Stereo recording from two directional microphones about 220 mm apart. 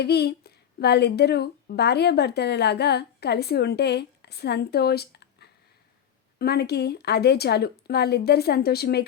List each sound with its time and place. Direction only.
0.0 s speech: 50° left (ahead or behind)